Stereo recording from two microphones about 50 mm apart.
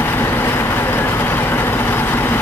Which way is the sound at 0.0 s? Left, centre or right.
Left.